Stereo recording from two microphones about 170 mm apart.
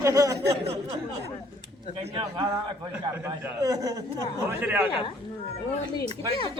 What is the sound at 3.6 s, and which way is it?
Speech, 20° right (ahead or behind).